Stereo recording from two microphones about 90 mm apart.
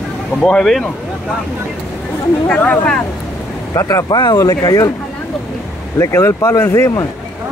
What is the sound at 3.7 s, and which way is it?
Speech, 40° left (ahead or behind).